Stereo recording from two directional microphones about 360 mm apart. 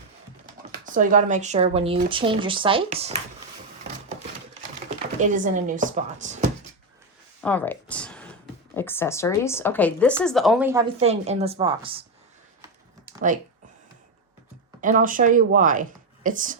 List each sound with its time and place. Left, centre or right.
0.4 s speech: right
5.2 s speech: right
7.4 s speech: centre
13.1 s speech: right
14.8 s a woman's voice: right